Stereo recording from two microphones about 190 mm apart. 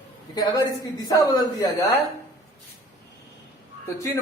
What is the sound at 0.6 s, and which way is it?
A woman's voice, 20° left (ahead or behind).